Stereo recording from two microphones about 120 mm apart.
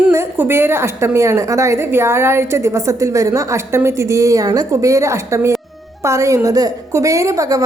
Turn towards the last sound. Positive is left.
turn(degrees=-30)  # may be behind; listen again after turning